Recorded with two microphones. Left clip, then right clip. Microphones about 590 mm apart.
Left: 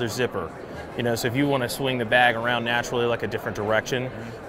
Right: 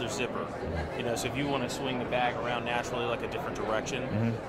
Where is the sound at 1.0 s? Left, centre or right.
Left.